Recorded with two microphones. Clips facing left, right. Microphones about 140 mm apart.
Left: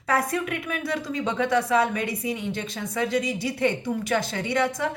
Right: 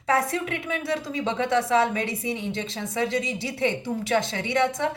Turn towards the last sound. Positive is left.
turn(degrees=-20)  # may be behind; listen again after turning